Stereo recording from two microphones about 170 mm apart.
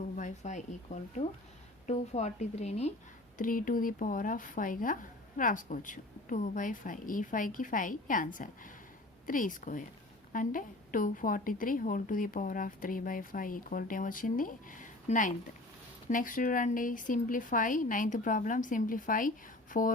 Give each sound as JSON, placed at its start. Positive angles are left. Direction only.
{"t": 0.2, "sound": "a woman's voice", "side_deg": 45}
{"t": 3.3, "sound": "a woman's voice", "side_deg": 55}